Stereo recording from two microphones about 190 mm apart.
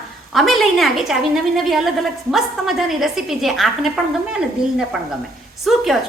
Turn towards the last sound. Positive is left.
turn(degrees=0)  # may be behind; listen again after turning